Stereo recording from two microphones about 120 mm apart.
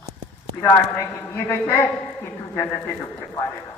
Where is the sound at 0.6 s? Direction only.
20° left (ahead or behind).